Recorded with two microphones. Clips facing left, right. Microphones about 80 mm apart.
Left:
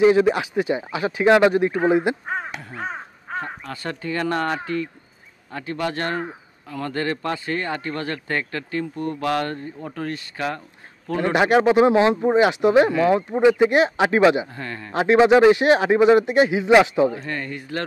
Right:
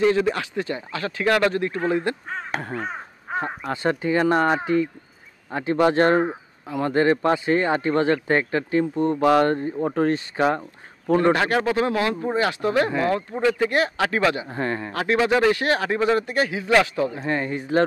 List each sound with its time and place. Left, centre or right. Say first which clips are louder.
0.0 s speech: left 4 dB; centre
2.5 s crow: right 7 dB; right
3.3 s a sound: right 3 dB; right
3.7 s speech: right 6 dB; right
11.3 s speech: left 5 dB; centre
14.5 s speech: right 7 dB; right
14.9 s speech: left 7 dB; left
17.3 s speech: right 5 dB; right